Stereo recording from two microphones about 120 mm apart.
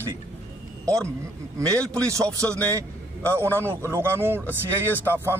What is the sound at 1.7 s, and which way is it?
Speech, 25° right (ahead or behind).